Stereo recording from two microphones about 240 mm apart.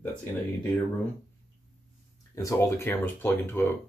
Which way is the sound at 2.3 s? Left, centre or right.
Centre.